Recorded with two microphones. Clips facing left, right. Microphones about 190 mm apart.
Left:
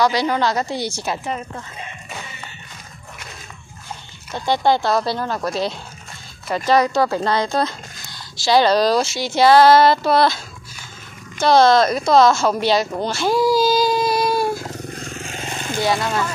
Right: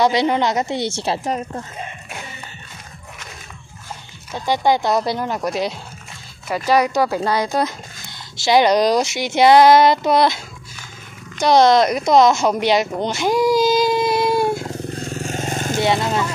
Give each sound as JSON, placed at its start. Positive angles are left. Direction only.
{"t": 0.0, "sound": "speech", "side_deg": -25}
{"t": 4.3, "sound": "speech", "side_deg": -10}
{"t": 13.0, "sound": "a sound", "side_deg": -20}
{"t": 15.2, "sound": "vehicle", "side_deg": -45}
{"t": 15.8, "sound": "speech", "side_deg": -20}